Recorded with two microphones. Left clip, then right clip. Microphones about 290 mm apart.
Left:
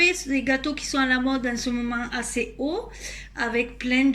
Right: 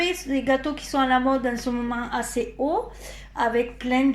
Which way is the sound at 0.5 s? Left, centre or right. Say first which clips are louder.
Right 4 dB; right.